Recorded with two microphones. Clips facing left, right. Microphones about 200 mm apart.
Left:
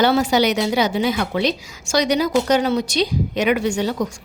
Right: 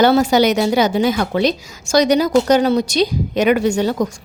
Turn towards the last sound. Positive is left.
turn(degrees=-45)  # may be behind; listen again after turning